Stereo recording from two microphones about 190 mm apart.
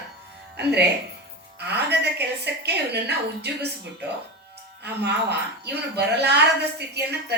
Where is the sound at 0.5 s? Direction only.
60° right (ahead or behind).